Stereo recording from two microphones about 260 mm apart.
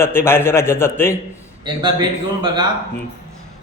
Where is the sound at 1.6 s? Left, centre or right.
Centre.